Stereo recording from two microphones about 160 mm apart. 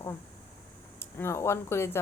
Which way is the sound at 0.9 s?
15° left (ahead or behind).